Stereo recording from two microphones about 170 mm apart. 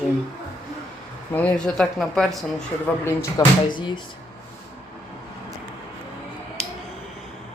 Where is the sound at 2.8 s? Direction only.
15° left (ahead or behind).